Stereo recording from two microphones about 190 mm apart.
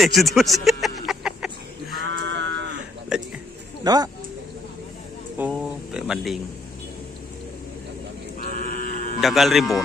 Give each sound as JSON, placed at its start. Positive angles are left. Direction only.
{"t": 0.0, "sound": "music", "side_deg": 0}
{"t": 2.0, "sound": "sheep", "side_deg": -70}
{"t": 3.1, "sound": "a sound", "side_deg": -5}
{"t": 3.8, "sound": "a man's voice", "side_deg": -20}
{"t": 5.5, "sound": "speech", "side_deg": 0}
{"t": 8.4, "sound": "sheep", "side_deg": 45}
{"t": 9.2, "sound": "speech", "side_deg": 0}